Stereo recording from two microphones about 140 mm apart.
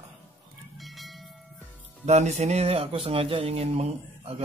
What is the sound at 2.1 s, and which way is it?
Speech, 50° right (ahead or behind).